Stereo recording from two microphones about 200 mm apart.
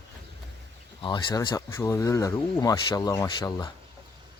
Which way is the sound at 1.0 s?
25° left (ahead or behind).